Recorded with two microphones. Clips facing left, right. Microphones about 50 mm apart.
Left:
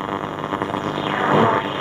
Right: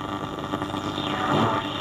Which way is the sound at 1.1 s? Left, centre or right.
Left.